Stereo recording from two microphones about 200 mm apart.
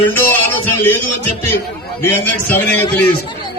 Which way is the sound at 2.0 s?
10° left (ahead or behind).